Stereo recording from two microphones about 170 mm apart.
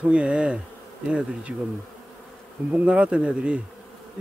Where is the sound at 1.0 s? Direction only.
5° right (ahead or behind).